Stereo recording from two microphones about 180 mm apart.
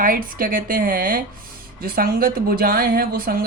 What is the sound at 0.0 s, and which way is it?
Speech, 50° right (ahead or behind).